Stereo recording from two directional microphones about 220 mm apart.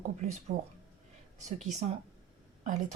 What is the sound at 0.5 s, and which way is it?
Speech, 35° right (ahead or behind).